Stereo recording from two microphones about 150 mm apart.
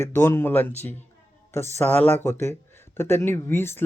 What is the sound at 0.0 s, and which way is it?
Speech, 15° left (ahead or behind).